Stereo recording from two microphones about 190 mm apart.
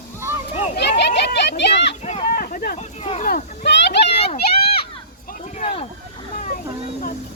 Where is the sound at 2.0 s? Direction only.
35° left (ahead or behind).